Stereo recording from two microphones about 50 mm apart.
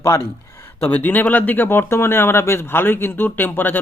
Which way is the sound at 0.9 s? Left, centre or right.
Left.